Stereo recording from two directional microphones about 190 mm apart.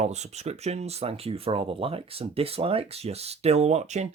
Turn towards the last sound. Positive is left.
turn(degrees=-35)  # may be behind; listen again after turning